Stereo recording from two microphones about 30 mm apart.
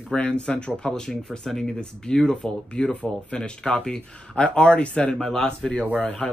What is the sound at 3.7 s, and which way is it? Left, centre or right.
Speech, left.